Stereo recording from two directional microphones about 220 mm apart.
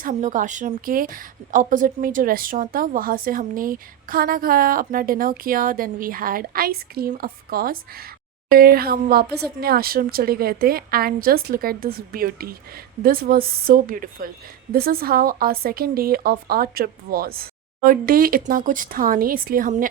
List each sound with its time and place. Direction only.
0.0 s a woman's voice: 35° right (ahead or behind)